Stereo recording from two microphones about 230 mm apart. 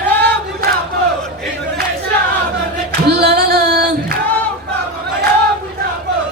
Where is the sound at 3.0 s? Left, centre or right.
Right.